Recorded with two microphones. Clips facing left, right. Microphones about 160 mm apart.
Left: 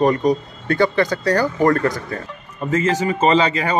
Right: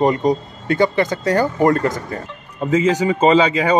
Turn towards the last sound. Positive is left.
turn(degrees=-10)  # may be behind; listen again after turning